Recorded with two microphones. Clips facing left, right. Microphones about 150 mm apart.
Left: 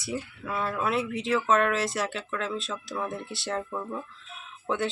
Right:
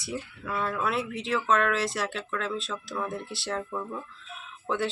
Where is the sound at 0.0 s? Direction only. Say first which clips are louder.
Left 2 dB; centre (ahead or behind).